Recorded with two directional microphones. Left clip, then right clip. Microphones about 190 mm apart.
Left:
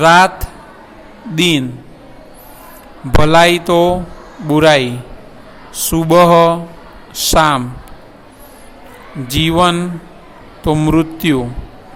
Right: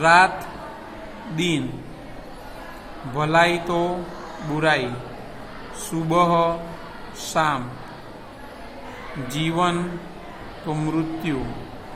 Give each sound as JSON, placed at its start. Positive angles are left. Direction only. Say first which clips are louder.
{"t": 0.0, "sound": "speech", "louder": "left 7 dB", "side_deg": 55}
{"t": 1.4, "sound": "a man's voice", "louder": "left 11 dB", "side_deg": 50}
{"t": 3.2, "sound": "speech", "louder": "left 9 dB", "side_deg": 55}
{"t": 5.9, "sound": "speech", "louder": "left 11 dB", "side_deg": 55}
{"t": 9.2, "sound": "a man's voice", "louder": "left 10 dB", "side_deg": 45}